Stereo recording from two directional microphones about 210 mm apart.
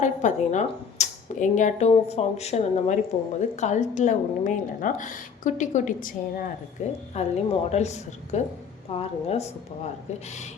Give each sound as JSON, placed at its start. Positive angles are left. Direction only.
{"t": 0.0, "sound": "a woman's voice", "side_deg": 35}